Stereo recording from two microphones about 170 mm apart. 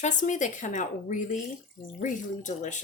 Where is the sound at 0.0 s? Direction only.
45° left (ahead or behind).